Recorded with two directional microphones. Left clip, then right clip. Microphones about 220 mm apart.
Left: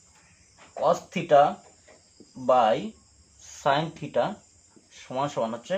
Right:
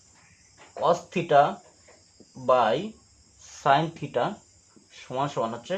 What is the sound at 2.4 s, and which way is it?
Speech, 25° right (ahead or behind).